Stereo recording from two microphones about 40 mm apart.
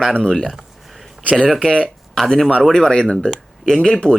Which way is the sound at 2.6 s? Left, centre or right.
Centre.